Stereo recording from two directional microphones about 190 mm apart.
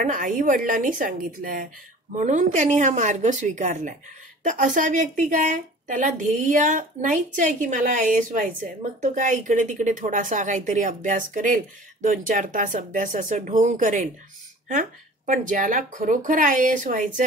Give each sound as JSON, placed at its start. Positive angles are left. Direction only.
{"t": 0.0, "sound": "a woman's voice", "side_deg": -45}
{"t": 15.2, "sound": "a woman's voice", "side_deg": -45}